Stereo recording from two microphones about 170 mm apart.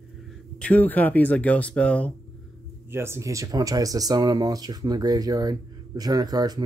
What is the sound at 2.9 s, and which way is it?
Speech, 15° right (ahead or behind).